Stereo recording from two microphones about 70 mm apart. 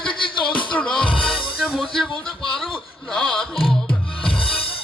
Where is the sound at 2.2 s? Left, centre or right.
Centre.